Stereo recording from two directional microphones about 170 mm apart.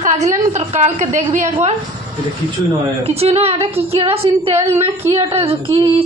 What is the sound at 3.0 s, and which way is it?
A woman's voice, 35° right (ahead or behind).